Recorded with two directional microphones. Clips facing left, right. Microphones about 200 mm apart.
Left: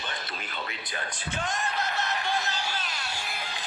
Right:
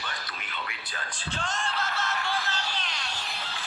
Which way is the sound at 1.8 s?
15° left (ahead or behind).